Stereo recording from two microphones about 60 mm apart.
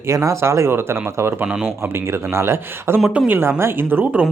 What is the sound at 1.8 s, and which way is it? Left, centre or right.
Speech, right.